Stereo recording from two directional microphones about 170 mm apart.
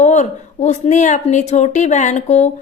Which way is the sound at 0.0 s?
45° left (ahead or behind).